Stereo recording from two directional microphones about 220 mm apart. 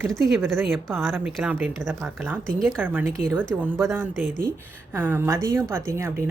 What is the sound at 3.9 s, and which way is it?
Speech, 10° right (ahead or behind).